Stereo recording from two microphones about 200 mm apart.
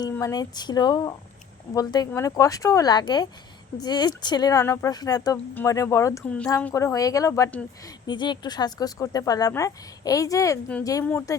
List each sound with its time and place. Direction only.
0.0 s speech: 20° left (ahead or behind)